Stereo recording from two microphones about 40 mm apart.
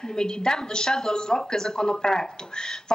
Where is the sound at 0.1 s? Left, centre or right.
Centre.